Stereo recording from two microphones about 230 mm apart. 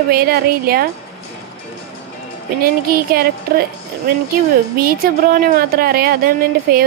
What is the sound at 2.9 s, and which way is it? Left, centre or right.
Speech, right.